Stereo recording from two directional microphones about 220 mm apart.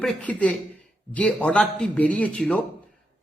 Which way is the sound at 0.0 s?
5° left (ahead or behind).